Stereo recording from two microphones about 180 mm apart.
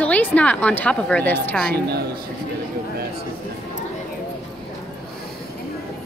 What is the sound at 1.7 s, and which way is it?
Speech, 65° right (ahead or behind).